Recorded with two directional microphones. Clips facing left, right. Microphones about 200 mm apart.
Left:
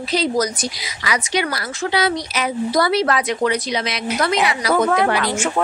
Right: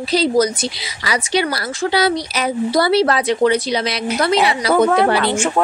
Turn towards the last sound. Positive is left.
turn(degrees=-30)  # may be behind; listen again after turning